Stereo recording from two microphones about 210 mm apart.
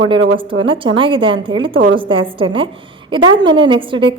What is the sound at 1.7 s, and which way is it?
Speech, 65° right (ahead or behind).